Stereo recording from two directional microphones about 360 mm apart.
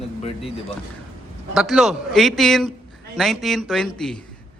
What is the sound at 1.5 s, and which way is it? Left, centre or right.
A man's voice, centre.